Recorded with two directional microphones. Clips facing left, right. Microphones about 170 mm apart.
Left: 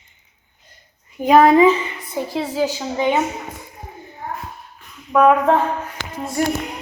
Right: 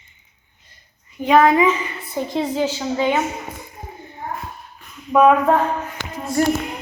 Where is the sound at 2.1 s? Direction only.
5° left (ahead or behind).